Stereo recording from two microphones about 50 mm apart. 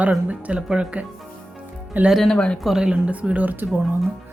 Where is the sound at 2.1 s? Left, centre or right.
Centre.